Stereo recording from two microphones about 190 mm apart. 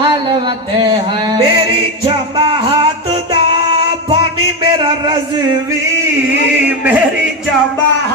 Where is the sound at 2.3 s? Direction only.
25° right (ahead or behind).